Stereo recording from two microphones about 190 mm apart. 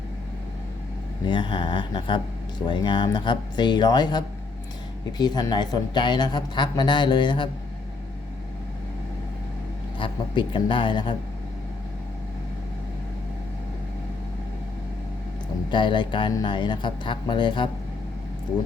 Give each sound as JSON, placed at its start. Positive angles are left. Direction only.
{"t": 1.2, "sound": "speech", "side_deg": 25}
{"t": 10.0, "sound": "speech", "side_deg": 25}
{"t": 15.7, "sound": "speech", "side_deg": 25}